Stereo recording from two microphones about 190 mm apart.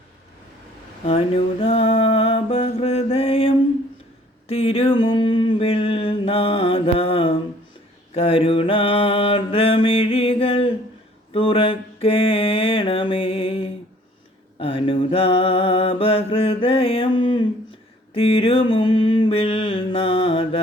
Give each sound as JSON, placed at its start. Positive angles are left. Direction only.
{"t": 1.6, "sound": "music", "side_deg": 30}
{"t": 4.4, "sound": "a sound", "side_deg": 30}
{"t": 8.1, "sound": "mantra", "side_deg": 30}